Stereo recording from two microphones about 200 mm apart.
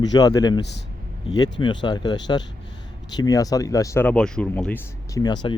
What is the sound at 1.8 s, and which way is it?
Speech, 20° left (ahead or behind).